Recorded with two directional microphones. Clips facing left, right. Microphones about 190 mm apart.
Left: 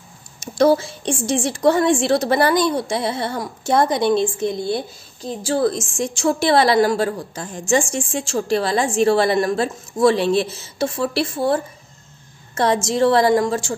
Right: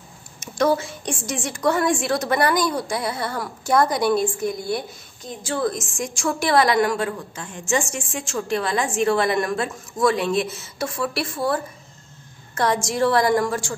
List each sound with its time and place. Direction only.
0.4 s a woman's voice: 30° left (ahead or behind)